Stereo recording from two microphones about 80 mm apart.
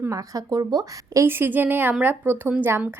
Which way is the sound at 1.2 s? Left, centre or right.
Right.